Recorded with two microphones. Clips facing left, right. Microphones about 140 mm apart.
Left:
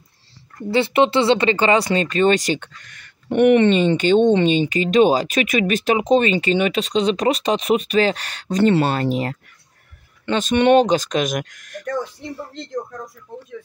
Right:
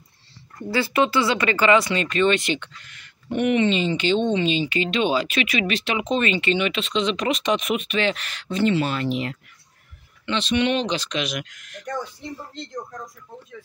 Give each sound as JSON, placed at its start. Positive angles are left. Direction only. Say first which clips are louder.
{"t": 0.7, "sound": "speech", "louder": "left 5 dB", "side_deg": 25}
{"t": 3.3, "sound": "speech", "louder": "left 7 dB", "side_deg": 60}